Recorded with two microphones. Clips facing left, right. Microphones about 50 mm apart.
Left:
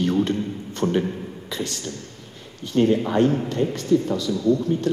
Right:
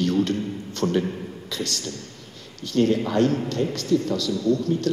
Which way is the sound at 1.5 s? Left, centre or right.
Centre.